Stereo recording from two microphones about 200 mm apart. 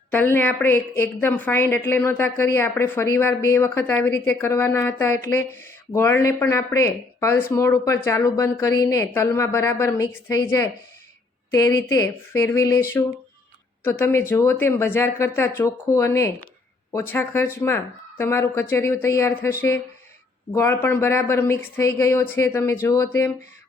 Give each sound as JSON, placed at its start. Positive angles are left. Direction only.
{"t": 0.1, "sound": "a woman's voice", "side_deg": 10}